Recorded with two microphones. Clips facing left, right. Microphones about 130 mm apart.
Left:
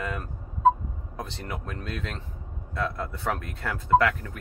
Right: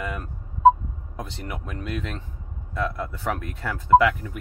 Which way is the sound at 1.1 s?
10° right (ahead or behind).